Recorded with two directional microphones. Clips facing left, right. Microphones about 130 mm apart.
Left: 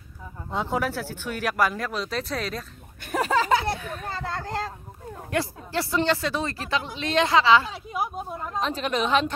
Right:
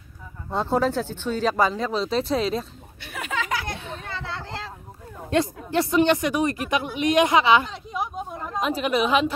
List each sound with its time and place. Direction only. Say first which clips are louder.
0.6 s speech: right 4 dB; 15° left (ahead or behind)
1.5 s speech: even; 20° right (ahead or behind)
3.0 s speech: left 7 dB; 40° left (ahead or behind)
4.0 s a sound: left 2 dB; 40° left (ahead or behind)
5.3 s speech: right 5 dB; 20° right (ahead or behind)
7.7 s a woman's voice: even; 5° left (ahead or behind)
8.5 s speech: right 3 dB; 10° right (ahead or behind)